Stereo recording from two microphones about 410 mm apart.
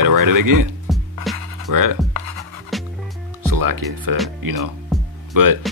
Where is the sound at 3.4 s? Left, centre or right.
Right.